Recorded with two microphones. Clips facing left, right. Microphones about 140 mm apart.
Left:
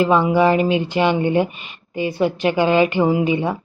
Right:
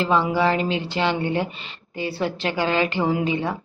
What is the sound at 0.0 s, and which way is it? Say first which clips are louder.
A woman's voice: left 5 dB; 15° left (ahead or behind).